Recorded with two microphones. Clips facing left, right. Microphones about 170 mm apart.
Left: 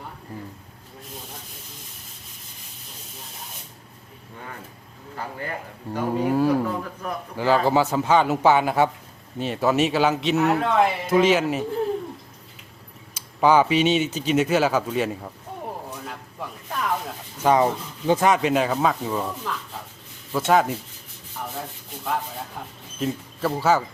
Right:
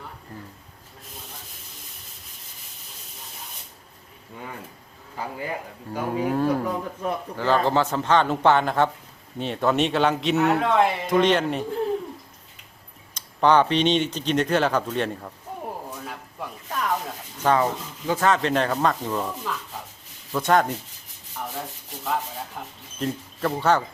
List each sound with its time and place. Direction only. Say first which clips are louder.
5.1 s speech: right 1 dB; 10° right (ahead or behind)
6.3 s speech: left 3 dB; 5° left (ahead or behind)
13.1 s speech: left 1 dB; 5° left (ahead or behind)
15.9 s a sound: even; centre (ahead or behind)
17.3 s speech: left 2 dB; 10° left (ahead or behind)
18.3 s speech: right 2 dB; 10° left (ahead or behind)
22.0 s speech: even; centre (ahead or behind)